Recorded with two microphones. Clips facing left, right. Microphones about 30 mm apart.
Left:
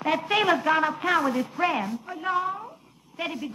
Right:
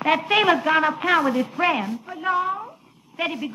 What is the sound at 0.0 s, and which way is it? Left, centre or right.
Speech, right.